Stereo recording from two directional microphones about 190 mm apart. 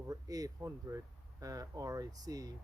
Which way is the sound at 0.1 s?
20° right (ahead or behind).